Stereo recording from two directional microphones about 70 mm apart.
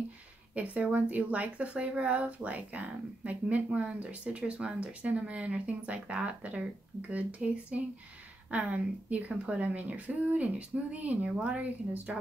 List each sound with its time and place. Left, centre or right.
0.6 s speech: right